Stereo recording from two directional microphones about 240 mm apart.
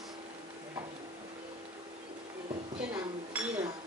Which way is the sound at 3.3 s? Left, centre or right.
Centre.